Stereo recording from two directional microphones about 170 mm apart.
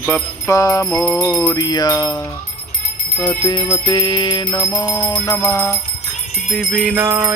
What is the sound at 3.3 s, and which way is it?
Music, 25° left (ahead or behind).